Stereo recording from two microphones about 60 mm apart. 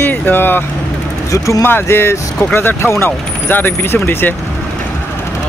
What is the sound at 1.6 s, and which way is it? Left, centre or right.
Speech, left.